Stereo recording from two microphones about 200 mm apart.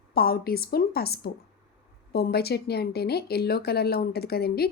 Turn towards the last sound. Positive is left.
turn(degrees=50)  # may be behind; listen again after turning